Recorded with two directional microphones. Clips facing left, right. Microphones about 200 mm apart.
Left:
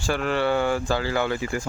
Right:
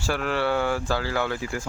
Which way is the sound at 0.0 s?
5° right (ahead or behind).